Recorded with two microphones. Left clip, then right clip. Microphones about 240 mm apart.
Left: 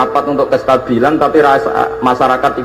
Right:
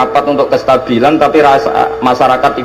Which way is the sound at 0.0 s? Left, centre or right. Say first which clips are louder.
Right 2 dB; right.